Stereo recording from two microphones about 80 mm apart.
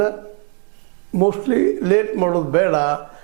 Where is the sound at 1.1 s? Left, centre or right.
Right.